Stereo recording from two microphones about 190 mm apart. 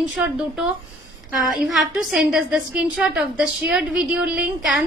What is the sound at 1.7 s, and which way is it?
A woman's voice, centre (ahead or behind).